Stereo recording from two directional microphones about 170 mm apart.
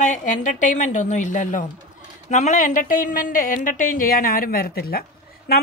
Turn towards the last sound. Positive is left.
turn(degrees=65)  # may be behind; listen again after turning